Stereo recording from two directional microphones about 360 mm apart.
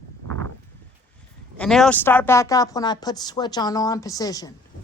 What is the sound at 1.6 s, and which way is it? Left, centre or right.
A woman's voice, centre.